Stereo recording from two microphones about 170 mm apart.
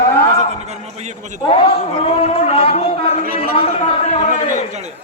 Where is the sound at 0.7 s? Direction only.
40° right (ahead or behind).